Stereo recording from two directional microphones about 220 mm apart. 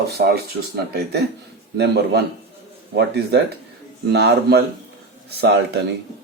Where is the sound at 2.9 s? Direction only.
50° right (ahead or behind).